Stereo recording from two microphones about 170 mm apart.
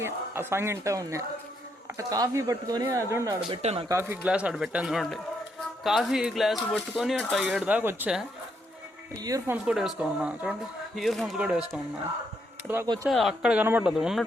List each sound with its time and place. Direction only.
0.0 s speech: 15° right (ahead or behind)
3.5 s speech: 35° right (ahead or behind)
3.8 s speech: 15° right (ahead or behind)
9.2 s speech: 20° right (ahead or behind)
9.6 s speech: centre (ahead or behind)
13.1 s speech: centre (ahead or behind)